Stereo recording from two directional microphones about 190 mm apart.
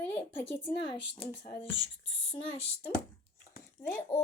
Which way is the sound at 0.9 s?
25° left (ahead or behind).